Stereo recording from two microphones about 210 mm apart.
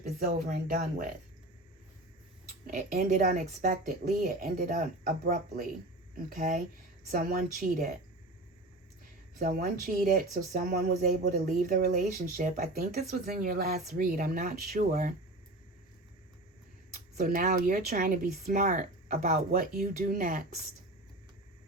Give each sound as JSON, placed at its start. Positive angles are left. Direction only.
{"t": 0.0, "sound": "speech", "side_deg": -40}
{"t": 2.6, "sound": "speech", "side_deg": -40}
{"t": 9.3, "sound": "speech", "side_deg": -45}
{"t": 16.9, "sound": "speech", "side_deg": -40}